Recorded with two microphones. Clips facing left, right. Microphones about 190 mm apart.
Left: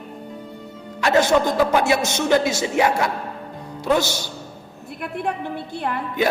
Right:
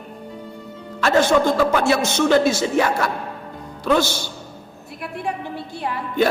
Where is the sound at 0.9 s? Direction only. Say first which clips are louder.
Right 1 dB; 20° left (ahead or behind).